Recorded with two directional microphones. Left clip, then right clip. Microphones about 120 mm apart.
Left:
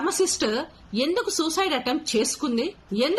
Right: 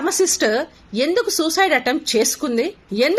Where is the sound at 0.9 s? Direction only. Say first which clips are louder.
Right 6 dB; 20° left (ahead or behind).